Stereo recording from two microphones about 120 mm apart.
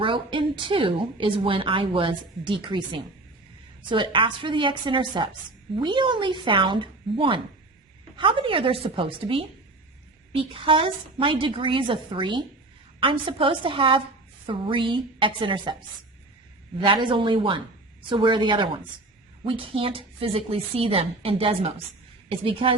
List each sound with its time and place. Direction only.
0.0 s a woman's voice: 45° right (ahead or behind)
16.8 s a woman's voice: 45° right (ahead or behind)